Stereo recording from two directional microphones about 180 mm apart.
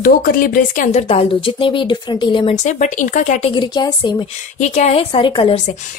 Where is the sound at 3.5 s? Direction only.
25° left (ahead or behind).